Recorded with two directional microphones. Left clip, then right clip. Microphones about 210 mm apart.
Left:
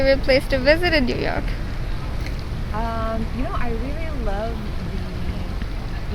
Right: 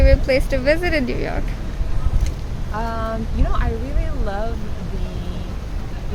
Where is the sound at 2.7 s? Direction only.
10° right (ahead or behind).